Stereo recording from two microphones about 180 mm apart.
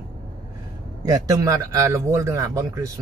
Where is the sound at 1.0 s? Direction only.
20° right (ahead or behind).